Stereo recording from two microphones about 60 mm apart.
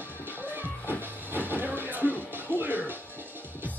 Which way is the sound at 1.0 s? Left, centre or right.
Right.